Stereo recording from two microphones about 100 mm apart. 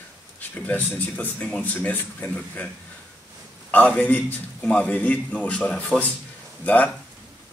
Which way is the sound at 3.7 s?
15° left (ahead or behind).